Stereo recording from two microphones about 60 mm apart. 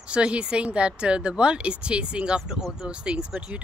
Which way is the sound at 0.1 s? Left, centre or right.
Centre.